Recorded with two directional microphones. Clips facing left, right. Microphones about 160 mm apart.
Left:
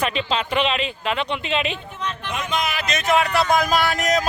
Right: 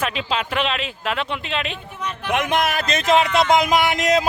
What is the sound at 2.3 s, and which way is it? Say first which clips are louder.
Speech: right 6 dB; 60° right (ahead or behind).